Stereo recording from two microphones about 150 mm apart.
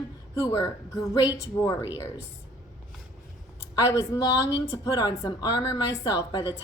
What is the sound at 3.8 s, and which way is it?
A woman's voice, 20° left (ahead or behind).